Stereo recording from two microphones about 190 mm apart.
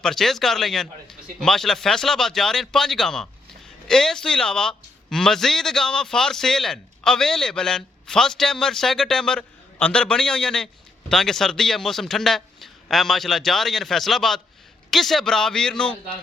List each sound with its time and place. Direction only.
0.0 s a man's voice: centre (ahead or behind)